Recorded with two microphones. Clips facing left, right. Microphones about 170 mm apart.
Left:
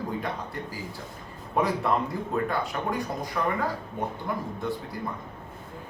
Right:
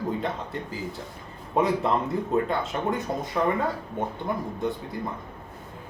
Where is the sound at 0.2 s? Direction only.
20° right (ahead or behind).